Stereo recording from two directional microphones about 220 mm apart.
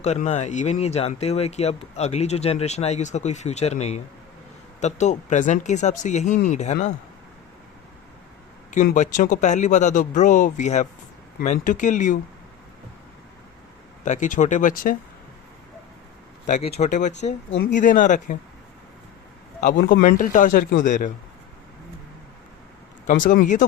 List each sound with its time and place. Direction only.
0.0 s speech: 30° left (ahead or behind)
8.7 s speech: 35° left (ahead or behind)
14.0 s speech: 35° left (ahead or behind)
16.5 s speech: 30° left (ahead or behind)
17.5 s speech: 55° left (ahead or behind)
17.7 s speech: 35° left (ahead or behind)
19.6 s speech: 40° left (ahead or behind)
23.2 s speech: 35° left (ahead or behind)